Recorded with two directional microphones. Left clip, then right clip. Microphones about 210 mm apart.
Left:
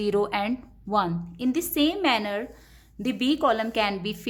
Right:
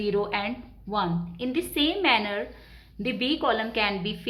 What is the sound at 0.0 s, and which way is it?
A woman's voice, 50° left (ahead or behind).